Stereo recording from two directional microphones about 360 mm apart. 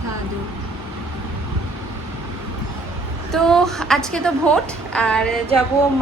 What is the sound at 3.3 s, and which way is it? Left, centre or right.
A woman's voice, centre.